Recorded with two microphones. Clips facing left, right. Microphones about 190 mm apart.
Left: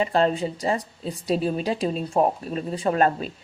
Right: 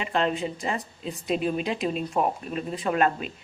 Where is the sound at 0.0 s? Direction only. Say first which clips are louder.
Left 5 dB; 35° left (ahead or behind).